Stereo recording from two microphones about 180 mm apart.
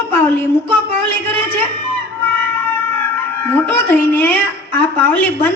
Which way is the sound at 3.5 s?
10° left (ahead or behind).